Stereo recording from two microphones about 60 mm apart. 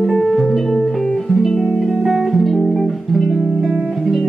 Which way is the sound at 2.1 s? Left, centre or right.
Centre.